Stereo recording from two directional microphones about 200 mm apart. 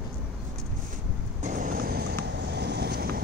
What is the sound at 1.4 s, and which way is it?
Vehicle, 40° right (ahead or behind).